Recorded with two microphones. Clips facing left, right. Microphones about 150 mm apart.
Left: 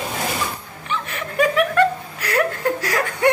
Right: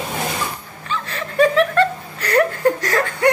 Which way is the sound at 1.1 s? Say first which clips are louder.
Right 4 dB; 10° left (ahead or behind).